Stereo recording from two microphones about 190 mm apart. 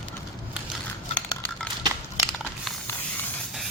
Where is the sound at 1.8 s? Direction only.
20° right (ahead or behind).